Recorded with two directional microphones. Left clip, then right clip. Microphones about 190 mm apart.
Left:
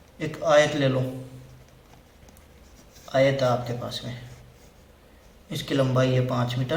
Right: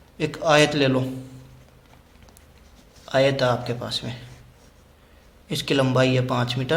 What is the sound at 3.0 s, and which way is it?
A man's voice, 55° right (ahead or behind).